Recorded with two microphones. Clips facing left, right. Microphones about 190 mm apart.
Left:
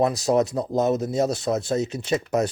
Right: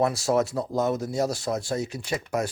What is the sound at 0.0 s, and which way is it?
Speech, 20° left (ahead or behind).